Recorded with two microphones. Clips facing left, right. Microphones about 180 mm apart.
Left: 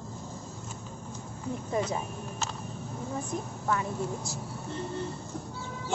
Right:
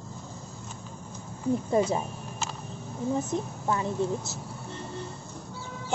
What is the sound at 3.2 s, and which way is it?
A woman's voice, 25° right (ahead or behind).